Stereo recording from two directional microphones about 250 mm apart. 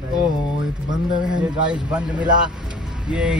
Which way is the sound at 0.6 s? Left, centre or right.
Centre.